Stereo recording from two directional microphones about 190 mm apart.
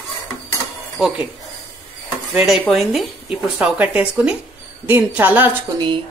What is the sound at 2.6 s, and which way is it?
A woman's voice, centre (ahead or behind).